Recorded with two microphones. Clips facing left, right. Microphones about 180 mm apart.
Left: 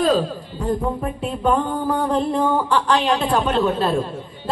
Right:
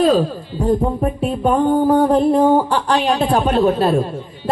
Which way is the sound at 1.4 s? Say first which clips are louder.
Right 6 dB; 35° right (ahead or behind).